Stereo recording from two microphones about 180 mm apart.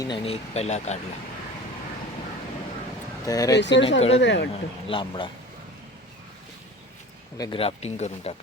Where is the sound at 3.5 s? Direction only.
80° left.